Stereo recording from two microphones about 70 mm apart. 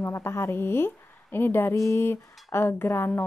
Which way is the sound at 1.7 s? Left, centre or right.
Left.